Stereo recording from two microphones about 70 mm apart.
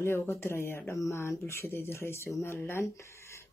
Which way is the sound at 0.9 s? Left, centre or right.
Left.